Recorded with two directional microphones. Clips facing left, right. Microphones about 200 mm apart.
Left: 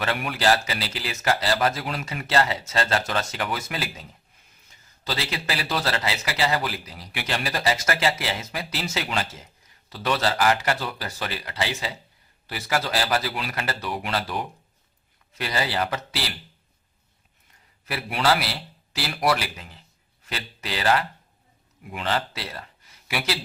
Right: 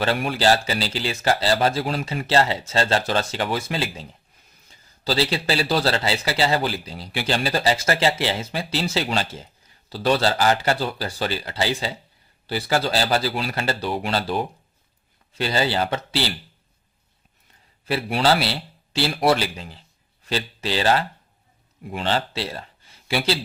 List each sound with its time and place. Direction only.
0.0 s a man's voice: 30° right (ahead or behind)
17.8 s a man's voice: 30° right (ahead or behind)